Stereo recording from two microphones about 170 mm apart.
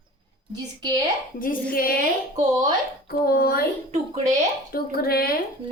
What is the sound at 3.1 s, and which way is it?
Speech, 65° left (ahead or behind).